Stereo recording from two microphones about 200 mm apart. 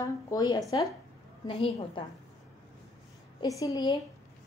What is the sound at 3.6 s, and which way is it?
Speech, 20° left (ahead or behind).